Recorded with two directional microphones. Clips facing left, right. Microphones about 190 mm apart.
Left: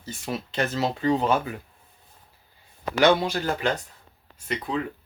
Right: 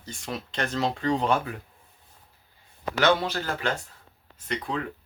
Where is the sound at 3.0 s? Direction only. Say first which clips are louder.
Left 3 dB; 15° left (ahead or behind).